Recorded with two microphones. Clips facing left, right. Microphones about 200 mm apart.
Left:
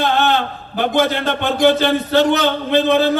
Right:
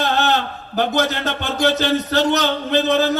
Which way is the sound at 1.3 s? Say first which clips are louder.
Left 6 dB; 50° left (ahead or behind).